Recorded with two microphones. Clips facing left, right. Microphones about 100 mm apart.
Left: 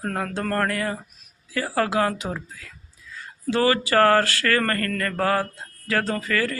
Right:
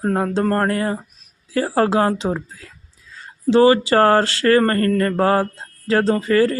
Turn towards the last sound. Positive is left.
turn(degrees=-30)  # may be behind; listen again after turning